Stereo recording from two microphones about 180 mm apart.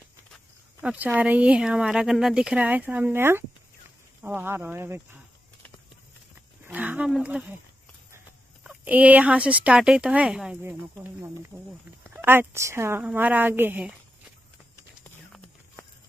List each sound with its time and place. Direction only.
0.7 s speech: 5° right (ahead or behind)
6.7 s speech: 10° right (ahead or behind)
8.6 s speech: 10° right (ahead or behind)